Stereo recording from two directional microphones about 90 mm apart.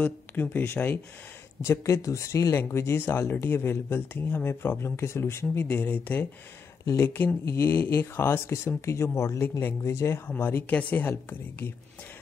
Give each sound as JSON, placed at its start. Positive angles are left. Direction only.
{"t": 0.0, "sound": "speech", "side_deg": 20}
{"t": 1.6, "sound": "speech", "side_deg": 35}